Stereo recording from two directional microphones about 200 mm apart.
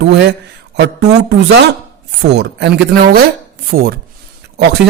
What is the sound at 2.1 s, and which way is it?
Speech, 55° right (ahead or behind).